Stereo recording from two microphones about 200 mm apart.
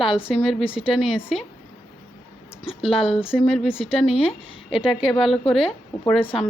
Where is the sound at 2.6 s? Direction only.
Centre (ahead or behind).